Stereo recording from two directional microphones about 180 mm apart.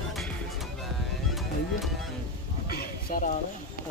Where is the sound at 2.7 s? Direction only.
60° left (ahead or behind).